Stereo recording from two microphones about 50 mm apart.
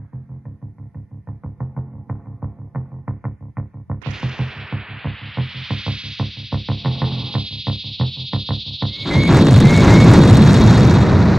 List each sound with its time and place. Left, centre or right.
1.8 s music: centre
6.1 s music: centre